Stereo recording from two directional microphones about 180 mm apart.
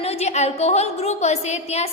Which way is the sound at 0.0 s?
35° left (ahead or behind).